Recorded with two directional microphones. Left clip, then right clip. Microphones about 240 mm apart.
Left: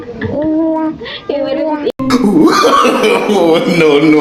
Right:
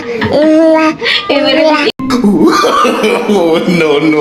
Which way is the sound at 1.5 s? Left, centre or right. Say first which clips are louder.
Right 7 dB; right.